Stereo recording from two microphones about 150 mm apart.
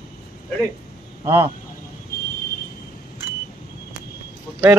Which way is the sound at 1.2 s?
20° right (ahead or behind).